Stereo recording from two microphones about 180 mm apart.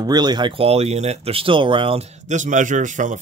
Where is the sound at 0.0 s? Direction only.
25° right (ahead or behind).